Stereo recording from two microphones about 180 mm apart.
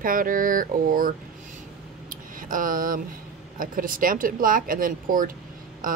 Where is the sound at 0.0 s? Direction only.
50° right (ahead or behind).